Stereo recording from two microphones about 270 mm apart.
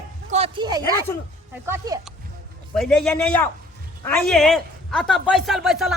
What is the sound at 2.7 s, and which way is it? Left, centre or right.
A man's voice, centre.